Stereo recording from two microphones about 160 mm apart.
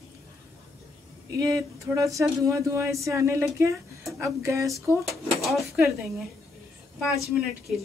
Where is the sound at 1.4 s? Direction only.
20° right (ahead or behind).